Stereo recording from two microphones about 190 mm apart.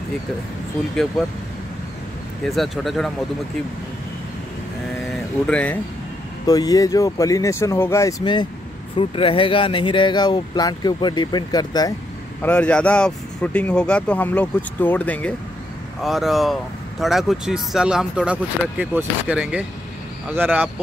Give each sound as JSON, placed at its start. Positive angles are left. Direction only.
{"t": 2.4, "sound": "speech", "side_deg": 0}
{"t": 5.5, "sound": "speech", "side_deg": 5}
{"t": 6.4, "sound": "speech", "side_deg": 20}
{"t": 12.4, "sound": "speech", "side_deg": 10}